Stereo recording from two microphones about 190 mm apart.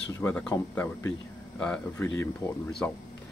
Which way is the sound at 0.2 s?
10° left (ahead or behind).